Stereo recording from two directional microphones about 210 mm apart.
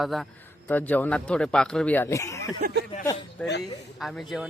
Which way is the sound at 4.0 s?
Centre (ahead or behind).